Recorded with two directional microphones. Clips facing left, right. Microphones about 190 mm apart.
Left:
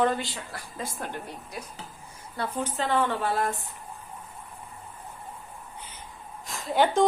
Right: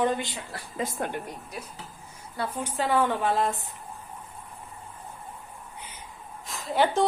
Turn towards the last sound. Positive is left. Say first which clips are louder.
# left 1 dB
turn(degrees=0)  # may be behind; listen again after turning